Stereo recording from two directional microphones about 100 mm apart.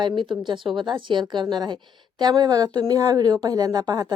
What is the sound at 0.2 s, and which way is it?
A woman's voice, 55° right (ahead or behind).